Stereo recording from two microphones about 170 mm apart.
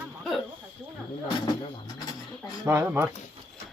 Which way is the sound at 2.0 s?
20° left (ahead or behind).